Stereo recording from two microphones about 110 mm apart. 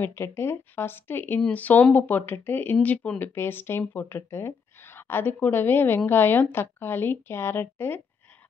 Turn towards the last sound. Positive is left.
turn(degrees=20)  # may be behind; listen again after turning